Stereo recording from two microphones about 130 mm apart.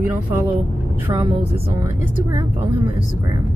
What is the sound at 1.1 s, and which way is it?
Speech, 30° right (ahead or behind).